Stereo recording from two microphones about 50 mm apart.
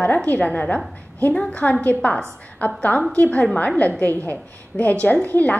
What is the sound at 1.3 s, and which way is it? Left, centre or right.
Speech, centre.